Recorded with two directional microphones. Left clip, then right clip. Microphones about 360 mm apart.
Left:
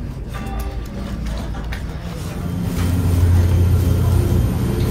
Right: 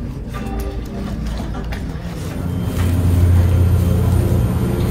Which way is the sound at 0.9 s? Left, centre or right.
Centre.